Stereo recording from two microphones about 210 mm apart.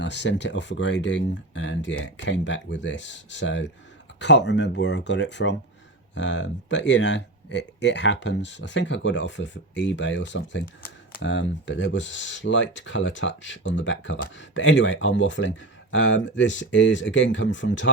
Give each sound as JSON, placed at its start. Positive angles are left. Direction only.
{"t": 0.0, "sound": "speech", "side_deg": 60}